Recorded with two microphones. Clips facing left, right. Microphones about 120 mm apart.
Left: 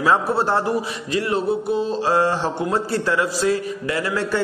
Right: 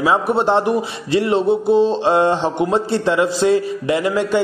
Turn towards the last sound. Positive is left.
turn(degrees=-20)  # may be behind; listen again after turning